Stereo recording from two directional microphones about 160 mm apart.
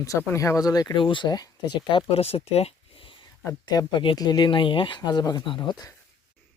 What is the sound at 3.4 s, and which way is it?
Speech, 20° left (ahead or behind).